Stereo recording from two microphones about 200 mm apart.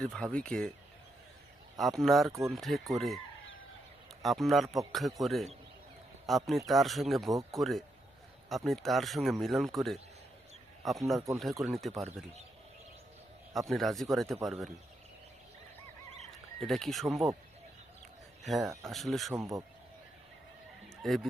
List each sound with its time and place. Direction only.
0.0 s speech: 5° left (ahead or behind)
1.8 s speech: centre (ahead or behind)
4.2 s speech: centre (ahead or behind)
7.3 s speech: 15° right (ahead or behind)
7.6 s speech: centre (ahead or behind)
13.5 s speech: centre (ahead or behind)
16.6 s speech: centre (ahead or behind)
18.4 s speech: centre (ahead or behind)
19.3 s speech: 15° right (ahead or behind)
21.0 s speech: centre (ahead or behind)